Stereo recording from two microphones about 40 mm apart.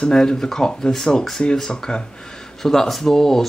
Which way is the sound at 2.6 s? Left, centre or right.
Centre.